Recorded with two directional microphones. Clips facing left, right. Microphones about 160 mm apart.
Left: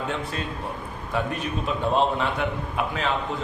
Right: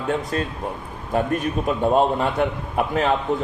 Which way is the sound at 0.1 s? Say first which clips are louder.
Right 6 dB; 40° right (ahead or behind).